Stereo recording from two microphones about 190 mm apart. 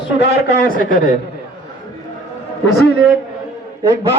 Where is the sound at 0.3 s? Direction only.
45° left (ahead or behind).